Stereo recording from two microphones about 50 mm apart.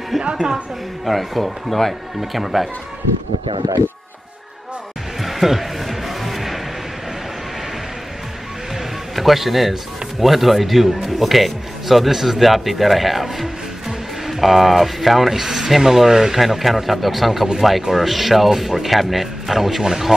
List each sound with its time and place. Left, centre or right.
0.2 s a woman's voice: centre
1.0 s speech: centre
5.2 s music: centre
8.7 s music: centre
10.2 s speech: centre